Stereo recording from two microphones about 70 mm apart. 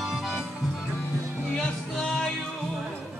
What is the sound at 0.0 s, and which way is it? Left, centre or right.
Music, centre.